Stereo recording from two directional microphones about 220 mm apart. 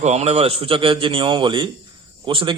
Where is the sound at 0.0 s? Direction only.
30° right (ahead or behind).